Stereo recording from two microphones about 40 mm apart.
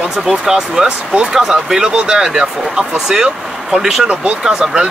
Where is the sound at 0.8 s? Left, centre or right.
Right.